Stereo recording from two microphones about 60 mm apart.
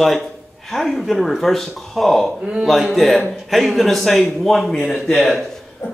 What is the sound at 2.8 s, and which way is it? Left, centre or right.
A man's voice, centre.